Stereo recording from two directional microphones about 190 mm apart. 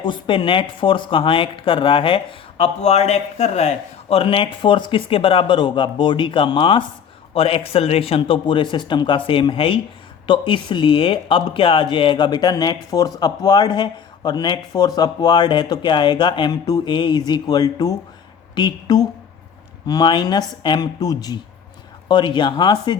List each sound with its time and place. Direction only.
0.0 s speech: 25° left (ahead or behind)